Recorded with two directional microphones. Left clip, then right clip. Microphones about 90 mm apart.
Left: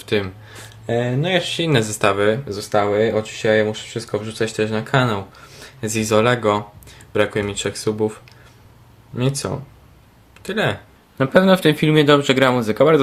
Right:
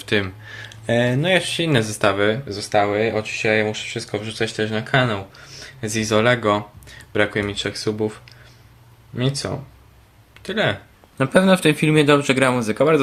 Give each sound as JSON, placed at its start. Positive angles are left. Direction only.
{"t": 0.0, "sound": "speech", "side_deg": 15}
{"t": 0.9, "sound": "speech", "side_deg": -10}
{"t": 1.7, "sound": "speech", "side_deg": 20}
{"t": 2.6, "sound": "speech", "side_deg": 50}
{"t": 6.1, "sound": "speech", "side_deg": 30}
{"t": 11.2, "sound": "a man's voice", "side_deg": 10}